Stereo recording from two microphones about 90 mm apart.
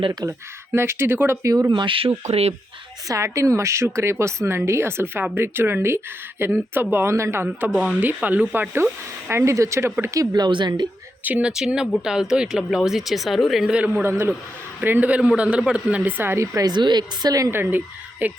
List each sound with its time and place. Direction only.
0.1 s speech: 35° right (ahead or behind)
1.5 s speech: 40° right (ahead or behind)
1.7 s speech: 65° right (ahead or behind); by 2.4 s 90° right
3.1 s speech: 35° right (ahead or behind)
7.7 s speech: 5° right (ahead or behind)
8.0 s speech: 15° right (ahead or behind)
9.3 s speech: 35° right (ahead or behind)
10.2 s a woman's voice: 50° right (ahead or behind)
11.2 s speech: 20° right (ahead or behind)
11.5 s speech: 5° right (ahead or behind)
14.0 s speech: 25° right (ahead or behind)
16.6 s a woman's voice: 50° right (ahead or behind)
17.5 s speech: 25° right (ahead or behind)